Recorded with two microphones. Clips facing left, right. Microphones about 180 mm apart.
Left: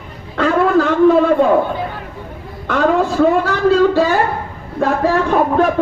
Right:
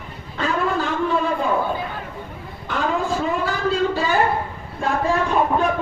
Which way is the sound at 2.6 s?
75° left (ahead or behind).